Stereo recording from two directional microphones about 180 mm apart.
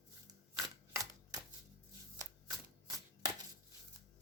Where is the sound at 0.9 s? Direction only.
20° right (ahead or behind).